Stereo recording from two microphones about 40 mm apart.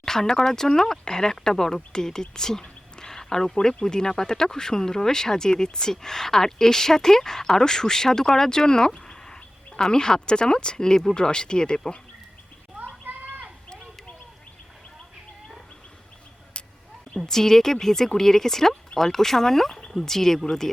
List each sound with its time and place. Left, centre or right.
0.0 s speech: centre
13.1 s bird: right
17.2 s speech: centre